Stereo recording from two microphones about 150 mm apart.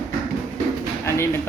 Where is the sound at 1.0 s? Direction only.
15° left (ahead or behind).